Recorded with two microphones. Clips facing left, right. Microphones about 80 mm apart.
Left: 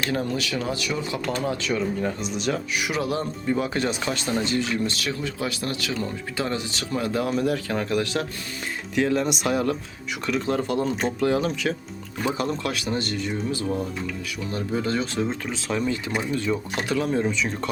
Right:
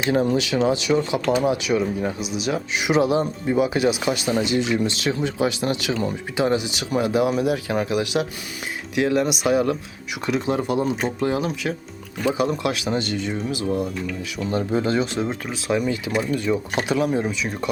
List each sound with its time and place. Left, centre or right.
0.0 s speech: right
2.7 s speech: right
14.3 s speech: right; by 16.7 s centre
16.9 s speech: centre